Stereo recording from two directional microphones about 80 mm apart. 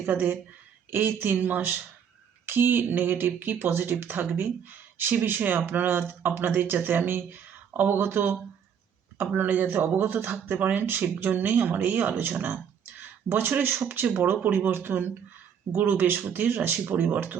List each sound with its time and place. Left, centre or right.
0.0 s speech: right